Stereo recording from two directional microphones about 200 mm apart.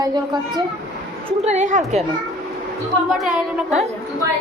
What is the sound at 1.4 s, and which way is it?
Speech, 35° right (ahead or behind).